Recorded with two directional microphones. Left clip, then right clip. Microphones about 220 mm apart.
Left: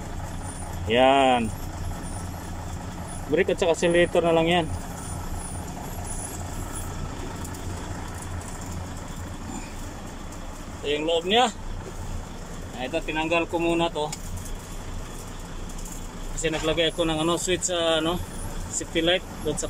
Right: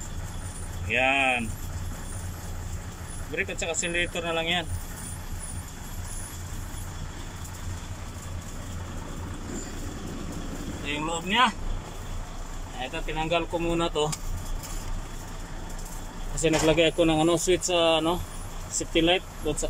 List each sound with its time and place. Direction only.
0.8 s speech: 20° left (ahead or behind)
3.3 s speech: 25° left (ahead or behind)
10.9 s speech: 20° left (ahead or behind)
12.8 s speech: 15° left (ahead or behind)
16.3 s speech: centre (ahead or behind)